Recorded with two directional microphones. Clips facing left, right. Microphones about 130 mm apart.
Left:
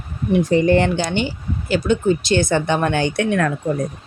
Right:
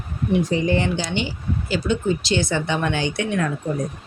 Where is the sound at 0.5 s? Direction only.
55° left (ahead or behind).